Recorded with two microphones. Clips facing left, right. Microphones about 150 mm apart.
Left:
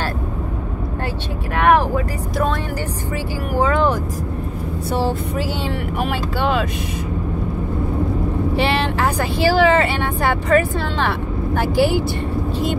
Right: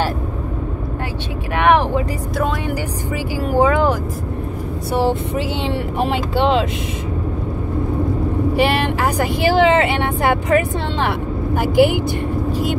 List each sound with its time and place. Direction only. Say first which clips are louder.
3.5 s speech: right 2 dB; 15° right (ahead or behind)
8.5 s speech: right 2 dB; 10° right (ahead or behind)